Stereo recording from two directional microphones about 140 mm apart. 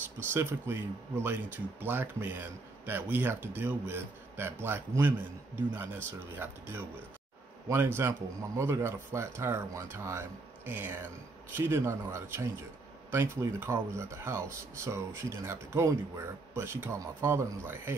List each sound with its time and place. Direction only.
0.3 s a man's voice: 20° right (ahead or behind)